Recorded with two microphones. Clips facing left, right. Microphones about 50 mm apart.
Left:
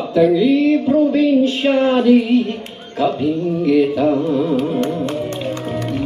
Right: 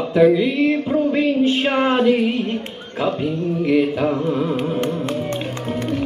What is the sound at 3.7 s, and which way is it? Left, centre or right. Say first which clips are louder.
Music: left 4 dB; right.